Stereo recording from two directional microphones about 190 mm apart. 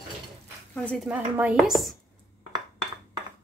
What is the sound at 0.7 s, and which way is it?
Speech, 5° left (ahead or behind).